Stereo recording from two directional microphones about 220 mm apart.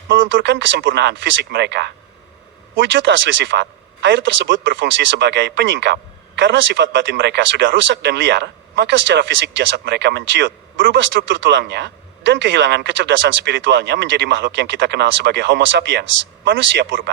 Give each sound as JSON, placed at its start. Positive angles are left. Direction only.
{"t": 0.1, "sound": "speech", "side_deg": -55}